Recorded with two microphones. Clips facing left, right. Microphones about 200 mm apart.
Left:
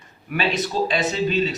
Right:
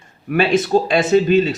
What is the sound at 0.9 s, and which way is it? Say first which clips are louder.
Speech: right 12 dB; 50° right (ahead or behind).